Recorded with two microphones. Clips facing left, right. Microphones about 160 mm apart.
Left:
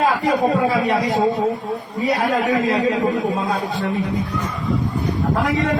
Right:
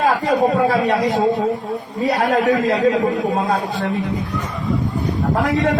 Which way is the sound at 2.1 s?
45° right (ahead or behind).